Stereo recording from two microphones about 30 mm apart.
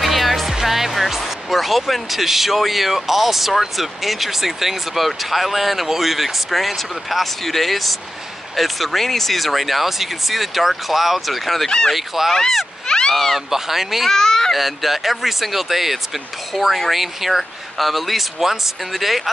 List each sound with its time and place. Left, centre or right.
0.0 s speech: centre
12.2 s speech: centre
12.8 s a sound: left
13.1 s speech: centre
13.5 s speech: centre
14.1 s speech: centre
14.5 s speech: centre